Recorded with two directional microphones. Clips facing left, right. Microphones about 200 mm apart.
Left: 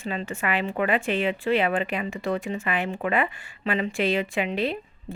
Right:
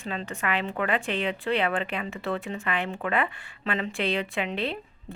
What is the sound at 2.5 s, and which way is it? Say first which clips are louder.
A woman's voice: left 3 dB; 5° left (ahead or behind).